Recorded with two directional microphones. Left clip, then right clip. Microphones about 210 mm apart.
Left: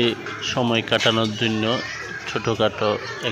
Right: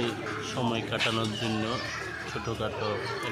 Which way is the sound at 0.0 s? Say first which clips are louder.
Left 9 dB; 30° left (ahead or behind).